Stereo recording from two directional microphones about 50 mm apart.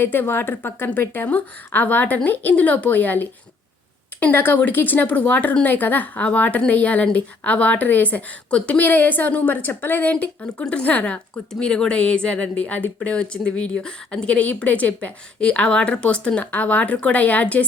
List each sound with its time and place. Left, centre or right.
0.0 s a woman's voice: left
8.4 s a woman's voice: left
10.1 s speech: left